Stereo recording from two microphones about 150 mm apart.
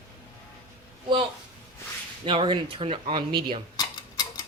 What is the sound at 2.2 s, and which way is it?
Speech, 35° right (ahead or behind).